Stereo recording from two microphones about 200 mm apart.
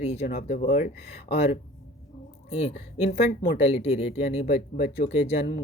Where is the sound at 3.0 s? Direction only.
50° left (ahead or behind).